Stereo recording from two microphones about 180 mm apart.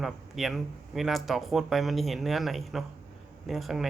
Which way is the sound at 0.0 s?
Centre (ahead or behind).